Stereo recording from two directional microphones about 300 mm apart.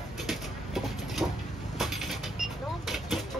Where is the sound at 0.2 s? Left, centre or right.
Centre.